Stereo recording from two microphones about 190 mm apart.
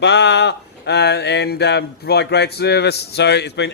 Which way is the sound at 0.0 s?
65° left (ahead or behind).